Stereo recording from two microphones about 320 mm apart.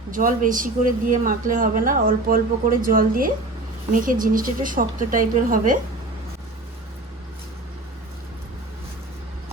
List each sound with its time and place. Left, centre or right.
0.1 s speech: right